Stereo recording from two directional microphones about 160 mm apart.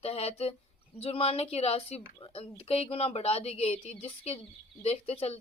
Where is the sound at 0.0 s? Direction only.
40° left (ahead or behind).